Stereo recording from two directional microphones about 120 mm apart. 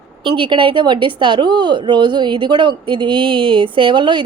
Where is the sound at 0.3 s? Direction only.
45° right (ahead or behind).